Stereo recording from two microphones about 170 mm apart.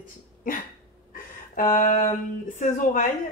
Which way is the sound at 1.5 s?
45° left (ahead or behind).